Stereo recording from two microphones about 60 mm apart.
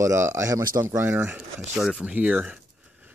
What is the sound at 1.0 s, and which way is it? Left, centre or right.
Speech, right.